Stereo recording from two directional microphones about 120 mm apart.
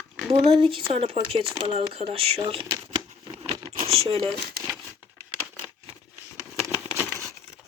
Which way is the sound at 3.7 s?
60° right (ahead or behind).